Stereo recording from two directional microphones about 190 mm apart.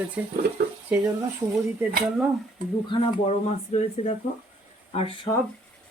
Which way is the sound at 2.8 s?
35° left (ahead or behind).